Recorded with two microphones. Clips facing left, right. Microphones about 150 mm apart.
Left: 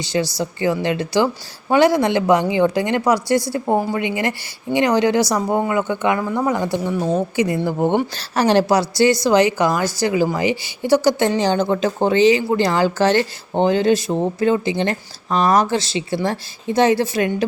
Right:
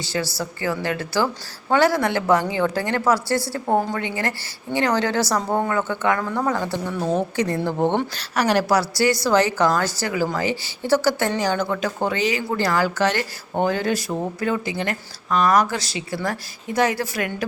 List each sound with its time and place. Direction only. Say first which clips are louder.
0.0 s a woman's voice: left 5 dB; 20° left (ahead or behind)
8.4 s speech: left 4 dB; 25° left (ahead or behind)